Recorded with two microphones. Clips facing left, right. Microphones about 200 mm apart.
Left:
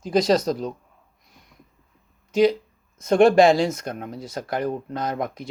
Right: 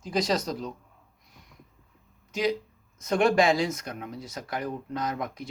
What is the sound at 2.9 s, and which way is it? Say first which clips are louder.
Speech: left 7 dB; 25° left (ahead or behind).